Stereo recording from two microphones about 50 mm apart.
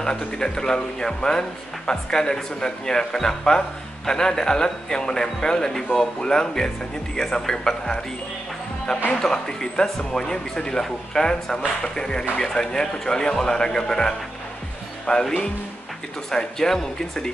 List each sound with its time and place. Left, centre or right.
0.0 s speech: centre
9.2 s speech: centre